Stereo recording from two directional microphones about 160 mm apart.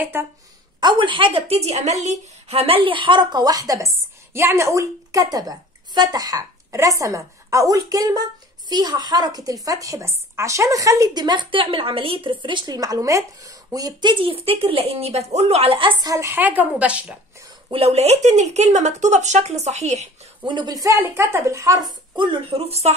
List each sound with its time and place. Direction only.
0.1 s a woman's voice: 15° right (ahead or behind)
0.7 s a woman's voice: 30° right (ahead or behind); by 17.2 s 5° right (ahead or behind)
17.6 s speech: 35° right (ahead or behind)
20.4 s a woman's voice: 25° right (ahead or behind)